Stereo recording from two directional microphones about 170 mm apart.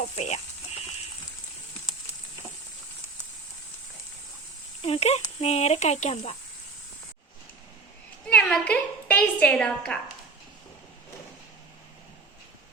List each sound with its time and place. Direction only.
0.2 s a sound: 40° left (ahead or behind)
4.8 s speech: 35° left (ahead or behind)
8.3 s a woman's voice: 5° left (ahead or behind)